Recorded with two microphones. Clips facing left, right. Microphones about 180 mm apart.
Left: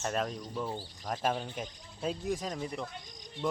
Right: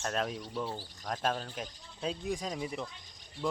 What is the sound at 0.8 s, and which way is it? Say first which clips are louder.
Speech: left 1 dB; 10° left (ahead or behind).